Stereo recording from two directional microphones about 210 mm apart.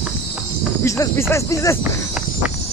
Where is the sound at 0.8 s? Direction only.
15° left (ahead or behind).